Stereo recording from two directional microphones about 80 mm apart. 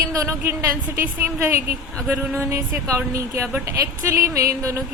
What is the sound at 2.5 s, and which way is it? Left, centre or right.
A woman's voice, right.